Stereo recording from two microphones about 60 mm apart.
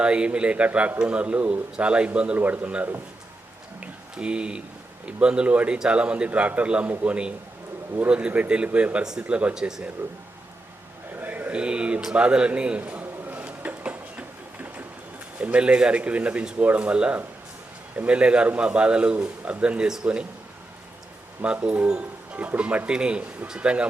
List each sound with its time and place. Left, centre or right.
0.0 s a man's voice: centre
3.8 s a sound: centre
5.0 s a man's voice: centre
9.6 s speech: centre
11.2 s a sound: right
15.4 s a man's voice: right
21.4 s a man's voice: centre